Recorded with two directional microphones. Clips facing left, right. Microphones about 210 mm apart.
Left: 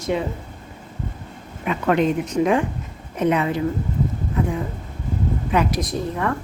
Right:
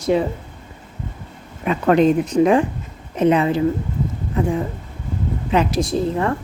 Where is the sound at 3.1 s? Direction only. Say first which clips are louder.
Right 4 dB; 30° right (ahead or behind).